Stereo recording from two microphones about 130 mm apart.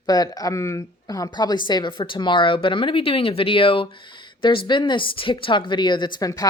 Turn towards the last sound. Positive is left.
turn(degrees=30)  # may be behind; listen again after turning